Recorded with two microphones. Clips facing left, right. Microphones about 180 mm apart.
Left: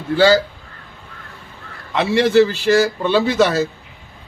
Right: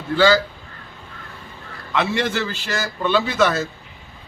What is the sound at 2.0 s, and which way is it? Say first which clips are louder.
A man's voice: left 8 dB; 30° left (ahead or behind).